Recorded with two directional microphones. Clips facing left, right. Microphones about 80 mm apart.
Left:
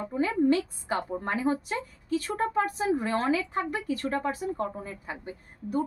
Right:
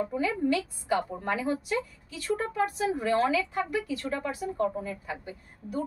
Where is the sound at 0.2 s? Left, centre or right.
Left.